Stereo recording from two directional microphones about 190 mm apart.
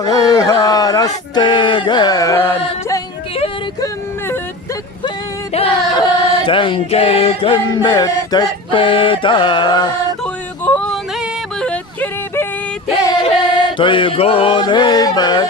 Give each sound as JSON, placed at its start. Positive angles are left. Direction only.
{"t": 0.0, "sound": "a sound", "side_deg": 20}
{"t": 0.6, "sound": "music", "side_deg": 20}
{"t": 3.3, "sound": "yodeling", "side_deg": 30}
{"t": 5.5, "sound": "choir", "side_deg": 30}
{"t": 11.6, "sound": "yodeling", "side_deg": 5}
{"t": 13.2, "sound": "music", "side_deg": 25}